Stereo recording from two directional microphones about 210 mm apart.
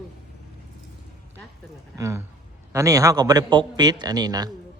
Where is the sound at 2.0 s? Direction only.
15° right (ahead or behind).